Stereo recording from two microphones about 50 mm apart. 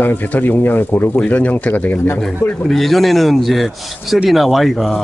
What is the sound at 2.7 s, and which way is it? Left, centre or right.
A man's voice, centre.